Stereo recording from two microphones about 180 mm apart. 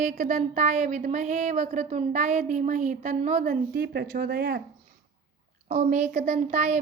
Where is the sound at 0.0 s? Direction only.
45° right (ahead or behind); by 4.6 s 60° right (ahead or behind).